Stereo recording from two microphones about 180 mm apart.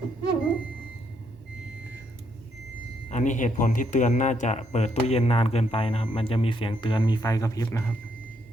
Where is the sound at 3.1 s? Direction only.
45° left (ahead or behind); by 7.8 s 20° left (ahead or behind).